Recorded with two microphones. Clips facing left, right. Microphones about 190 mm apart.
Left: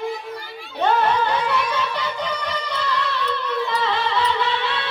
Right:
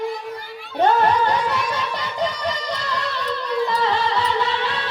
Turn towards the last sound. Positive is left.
turn(degrees=-40)  # may be behind; listen again after turning